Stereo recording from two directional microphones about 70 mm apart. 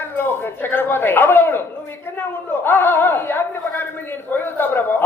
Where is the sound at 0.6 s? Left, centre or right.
Left.